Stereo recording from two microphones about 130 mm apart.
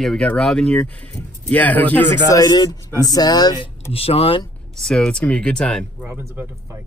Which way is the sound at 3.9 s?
45° left (ahead or behind).